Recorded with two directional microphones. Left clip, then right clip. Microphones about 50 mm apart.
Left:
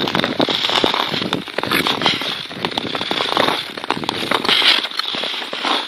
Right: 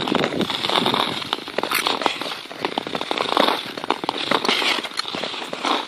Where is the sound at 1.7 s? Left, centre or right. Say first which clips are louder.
Left 4 dB; centre.